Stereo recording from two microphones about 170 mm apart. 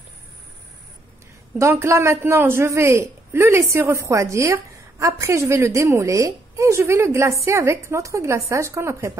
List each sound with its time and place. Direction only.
1.6 s a woman's voice: 15° right (ahead or behind)